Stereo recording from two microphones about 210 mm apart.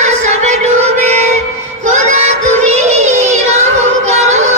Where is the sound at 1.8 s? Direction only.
35° right (ahead or behind).